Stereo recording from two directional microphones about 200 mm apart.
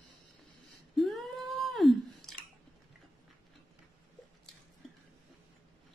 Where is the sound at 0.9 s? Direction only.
Centre (ahead or behind).